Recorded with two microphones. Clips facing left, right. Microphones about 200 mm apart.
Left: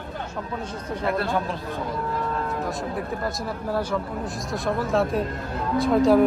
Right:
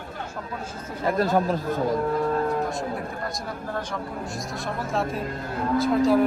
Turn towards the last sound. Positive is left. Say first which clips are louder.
# left 2 dB
turn(degrees=0)  # may be behind; listen again after turning